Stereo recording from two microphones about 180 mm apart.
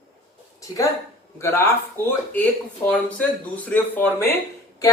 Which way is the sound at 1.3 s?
15° left (ahead or behind).